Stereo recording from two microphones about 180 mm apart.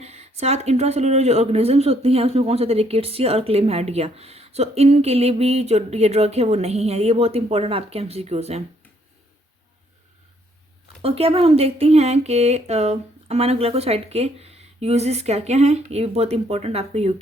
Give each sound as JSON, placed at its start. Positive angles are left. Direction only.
{"t": 0.0, "sound": "speech", "side_deg": -35}
{"t": 11.0, "sound": "speech", "side_deg": -35}